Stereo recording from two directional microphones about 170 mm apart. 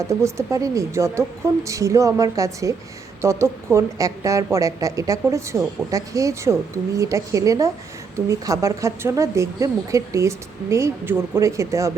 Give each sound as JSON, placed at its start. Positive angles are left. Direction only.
{"t": 0.1, "sound": "a woman's voice", "side_deg": -15}